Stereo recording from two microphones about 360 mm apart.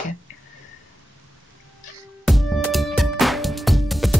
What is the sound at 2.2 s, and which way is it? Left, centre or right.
Music, centre.